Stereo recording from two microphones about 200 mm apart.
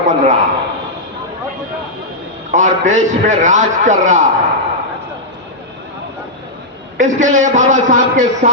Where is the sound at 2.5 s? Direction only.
35° right (ahead or behind).